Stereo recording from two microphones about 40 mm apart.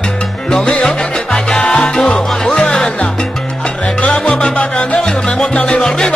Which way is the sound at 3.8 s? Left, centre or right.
Left.